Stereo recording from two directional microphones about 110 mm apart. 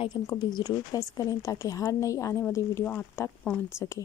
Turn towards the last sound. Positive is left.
turn(degrees=25)  # may be behind; listen again after turning